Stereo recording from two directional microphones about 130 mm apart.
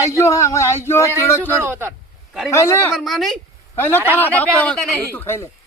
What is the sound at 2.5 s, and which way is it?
Speech, 20° left (ahead or behind).